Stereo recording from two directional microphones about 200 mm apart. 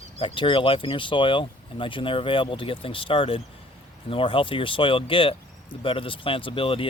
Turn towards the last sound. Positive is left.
turn(degrees=25)  # may be behind; listen again after turning